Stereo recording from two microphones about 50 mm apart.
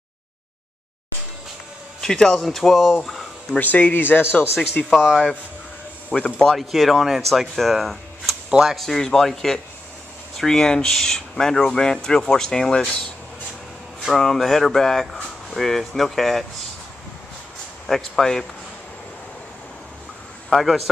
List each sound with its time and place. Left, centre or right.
2.0 s speech: centre
3.5 s speech: left
3.9 s speech: left
4.8 s speech: left
6.1 s speech: centre
6.5 s speech: centre
8.5 s speech: centre
8.7 s speech: centre
14.1 s speech: centre
17.8 s speech: centre
20.4 s speech: centre